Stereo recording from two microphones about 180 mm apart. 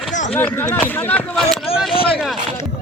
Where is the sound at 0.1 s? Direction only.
45° left (ahead or behind).